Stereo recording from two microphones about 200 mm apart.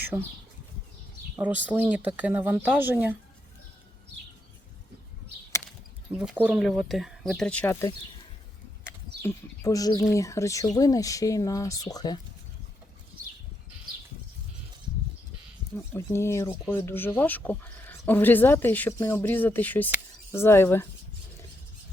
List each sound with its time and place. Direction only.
0.1 s speech: 15° right (ahead or behind)
1.4 s speech: 10° right (ahead or behind)
6.1 s speech: 5° right (ahead or behind); by 7.9 s 10° left (ahead or behind)
9.2 s speech: 15° left (ahead or behind)
15.9 s speech: 15° left (ahead or behind)